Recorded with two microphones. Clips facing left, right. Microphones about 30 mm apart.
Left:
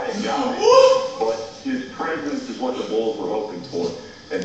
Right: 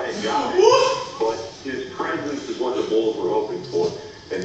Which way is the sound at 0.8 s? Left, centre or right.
Left.